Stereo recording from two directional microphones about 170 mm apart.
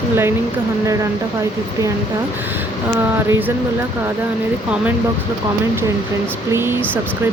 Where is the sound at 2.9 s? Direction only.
15° right (ahead or behind).